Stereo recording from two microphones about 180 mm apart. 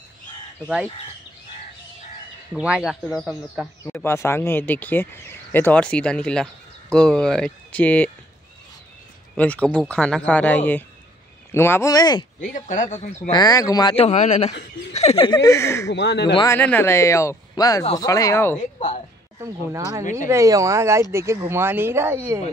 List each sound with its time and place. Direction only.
2.5 s speech: 5° right (ahead or behind)
3.8 s speech: 15° left (ahead or behind)
9.4 s speech: 5° left (ahead or behind); by 12.3 s 20° left (ahead or behind)
12.4 s speech: 45° left (ahead or behind)
13.3 s speech: 20° left (ahead or behind)
15.9 s speech: 75° left (ahead or behind)
16.5 s speech: 10° left (ahead or behind)
18.6 s a woman's voice: 40° left (ahead or behind)
19.4 s speech: 15° right (ahead or behind)